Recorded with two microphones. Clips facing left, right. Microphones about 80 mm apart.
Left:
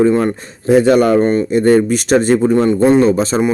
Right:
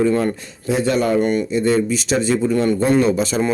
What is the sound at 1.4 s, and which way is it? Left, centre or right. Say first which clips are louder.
A man's voice: left 6 dB; left.